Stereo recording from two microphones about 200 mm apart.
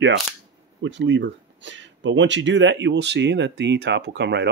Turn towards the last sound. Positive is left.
turn(degrees=-60)  # may be behind; listen again after turning